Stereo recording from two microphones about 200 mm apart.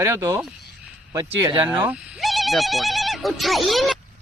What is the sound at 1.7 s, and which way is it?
Speech, 5° right (ahead or behind).